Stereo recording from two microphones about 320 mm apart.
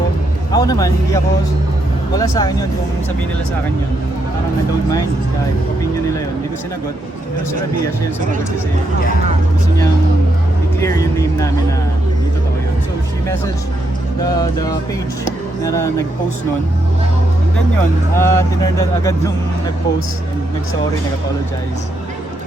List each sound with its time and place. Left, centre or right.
0.5 s speech: centre
10.8 s speech: centre
15.2 s speech: centre
18.1 s speech: centre